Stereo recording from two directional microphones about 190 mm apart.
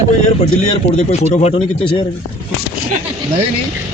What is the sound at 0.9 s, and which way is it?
Speech, 35° left (ahead or behind).